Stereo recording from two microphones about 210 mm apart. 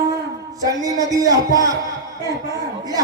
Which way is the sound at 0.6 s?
15° right (ahead or behind).